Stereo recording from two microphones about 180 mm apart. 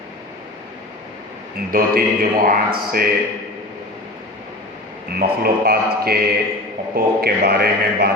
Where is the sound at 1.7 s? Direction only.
55° right (ahead or behind).